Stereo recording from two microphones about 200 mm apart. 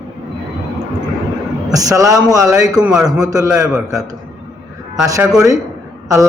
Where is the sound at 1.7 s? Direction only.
15° right (ahead or behind).